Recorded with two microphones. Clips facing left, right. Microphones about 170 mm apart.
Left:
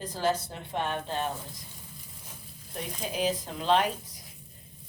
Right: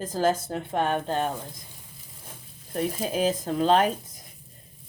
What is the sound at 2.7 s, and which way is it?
Speech, 45° right (ahead or behind).